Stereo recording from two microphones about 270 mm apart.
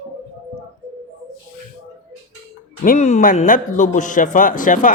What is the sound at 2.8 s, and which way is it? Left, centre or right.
A man's voice, left.